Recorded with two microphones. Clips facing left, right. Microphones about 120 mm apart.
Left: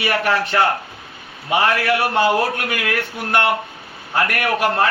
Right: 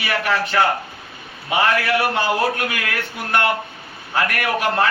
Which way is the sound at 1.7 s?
Centre (ahead or behind).